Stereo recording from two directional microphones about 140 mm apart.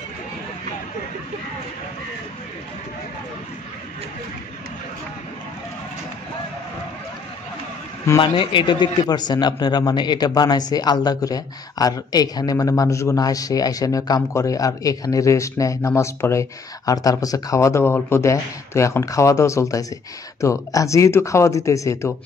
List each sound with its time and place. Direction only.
8.2 s speech: 35° left (ahead or behind)